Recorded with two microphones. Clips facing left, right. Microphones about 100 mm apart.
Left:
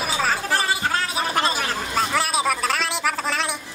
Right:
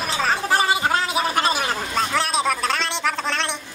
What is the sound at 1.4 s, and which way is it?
Gargling, 20° right (ahead or behind).